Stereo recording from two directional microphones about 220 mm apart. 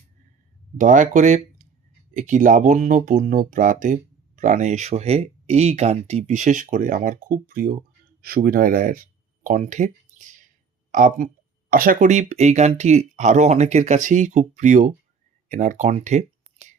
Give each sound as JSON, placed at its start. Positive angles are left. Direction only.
{"t": 0.8, "sound": "speech", "side_deg": -35}